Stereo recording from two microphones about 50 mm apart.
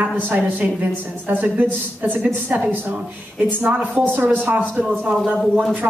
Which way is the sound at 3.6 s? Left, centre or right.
Right.